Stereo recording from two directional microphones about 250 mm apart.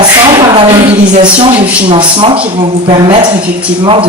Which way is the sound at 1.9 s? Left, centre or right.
Right.